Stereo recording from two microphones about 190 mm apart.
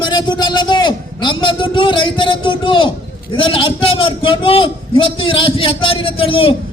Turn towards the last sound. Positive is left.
turn(degrees=30)  # may be behind; listen again after turning